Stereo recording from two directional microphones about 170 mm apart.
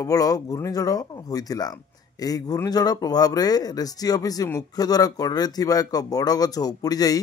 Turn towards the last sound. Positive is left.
turn(degrees=20)  # may be behind; listen again after turning